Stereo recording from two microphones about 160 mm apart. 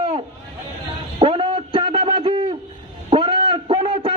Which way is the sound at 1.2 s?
35° right (ahead or behind).